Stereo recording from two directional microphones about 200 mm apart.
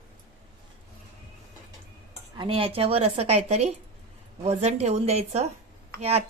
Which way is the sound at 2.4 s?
30° right (ahead or behind).